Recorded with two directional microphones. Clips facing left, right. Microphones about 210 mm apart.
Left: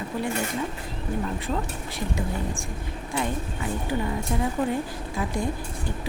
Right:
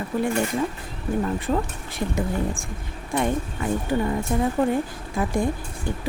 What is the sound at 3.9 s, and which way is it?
Speech, 45° right (ahead or behind).